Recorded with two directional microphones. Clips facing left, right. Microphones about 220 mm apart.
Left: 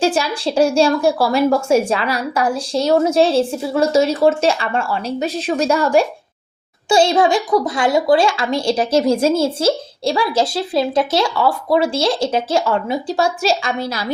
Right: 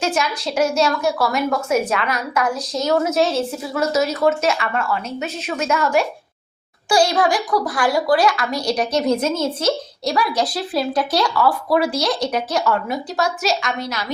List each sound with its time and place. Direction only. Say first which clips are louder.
0.0 s a woman's voice: left 4 dB; 30° left (ahead or behind)